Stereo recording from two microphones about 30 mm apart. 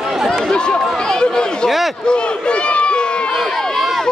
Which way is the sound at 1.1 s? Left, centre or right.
Left.